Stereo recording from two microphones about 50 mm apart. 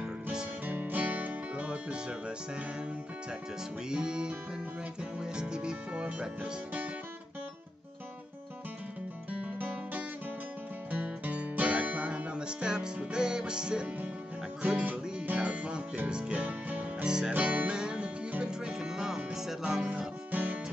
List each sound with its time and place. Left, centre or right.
0.0 s music: centre
0.7 s music: right; by 2.3 s centre
3.9 s music: centre
9.3 s music: right
17.0 s music: centre
17.3 s music: right; by 20.1 s centre
20.2 s music: right